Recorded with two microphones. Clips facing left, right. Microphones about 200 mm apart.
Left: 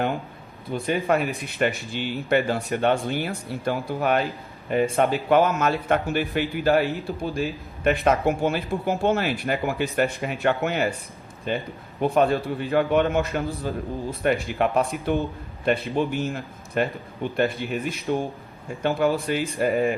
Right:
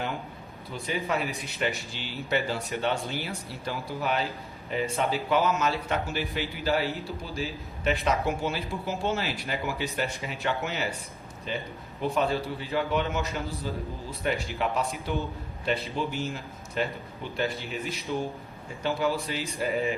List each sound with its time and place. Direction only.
0.7 s speech: 55° left (ahead or behind)